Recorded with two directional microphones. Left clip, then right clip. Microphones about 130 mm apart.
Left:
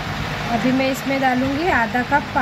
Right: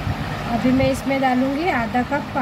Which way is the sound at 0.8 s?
25° right (ahead or behind).